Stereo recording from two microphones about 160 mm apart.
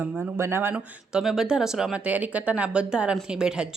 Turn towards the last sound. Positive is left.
turn(degrees=-5)  # may be behind; listen again after turning